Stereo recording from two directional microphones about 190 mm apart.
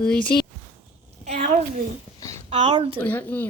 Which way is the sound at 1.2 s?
35° right (ahead or behind).